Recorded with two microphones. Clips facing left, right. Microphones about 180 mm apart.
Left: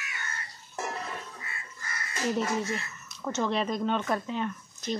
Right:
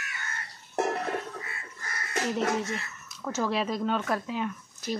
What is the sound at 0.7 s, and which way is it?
Music, 60° right (ahead or behind).